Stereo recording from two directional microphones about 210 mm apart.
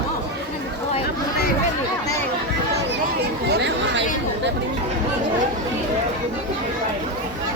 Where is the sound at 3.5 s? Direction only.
55° right (ahead or behind).